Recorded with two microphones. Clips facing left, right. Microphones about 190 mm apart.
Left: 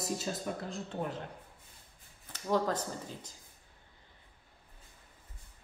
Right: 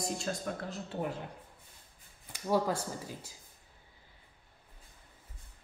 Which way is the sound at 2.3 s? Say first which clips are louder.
Right 1 dB; 10° right (ahead or behind).